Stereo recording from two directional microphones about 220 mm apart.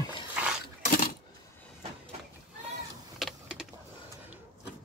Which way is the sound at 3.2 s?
5° right (ahead or behind).